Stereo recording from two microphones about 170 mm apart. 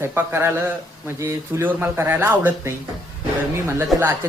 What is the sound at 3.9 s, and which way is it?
Speech, 15° right (ahead or behind).